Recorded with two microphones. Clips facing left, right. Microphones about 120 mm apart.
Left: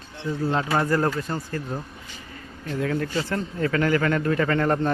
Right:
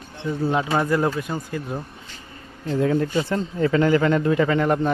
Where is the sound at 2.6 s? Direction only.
25° right (ahead or behind).